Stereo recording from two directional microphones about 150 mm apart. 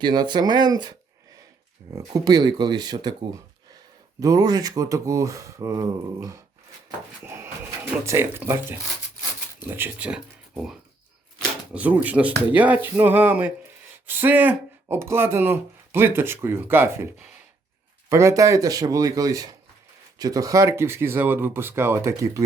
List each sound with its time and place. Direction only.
0.0 s speech: 30° right (ahead or behind)
4.2 s speech: 25° right (ahead or behind)
7.3 s a sound: 15° right (ahead or behind)
8.0 s speech: 15° right (ahead or behind)
18.1 s speech: 20° right (ahead or behind)